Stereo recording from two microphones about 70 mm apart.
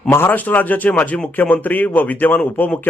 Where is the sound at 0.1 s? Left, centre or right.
Left.